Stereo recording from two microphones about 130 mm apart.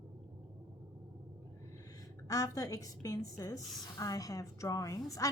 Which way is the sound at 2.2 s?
25° left (ahead or behind).